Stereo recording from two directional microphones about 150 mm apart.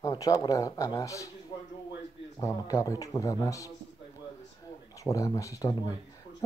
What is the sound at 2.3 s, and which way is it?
Speech, 20° left (ahead or behind).